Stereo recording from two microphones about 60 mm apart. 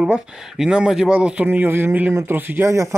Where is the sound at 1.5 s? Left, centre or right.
Right.